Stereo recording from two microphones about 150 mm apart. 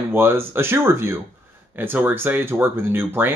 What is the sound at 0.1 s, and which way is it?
Speech, 15° right (ahead or behind).